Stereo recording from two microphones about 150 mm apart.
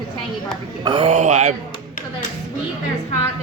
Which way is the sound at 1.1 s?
50° right (ahead or behind).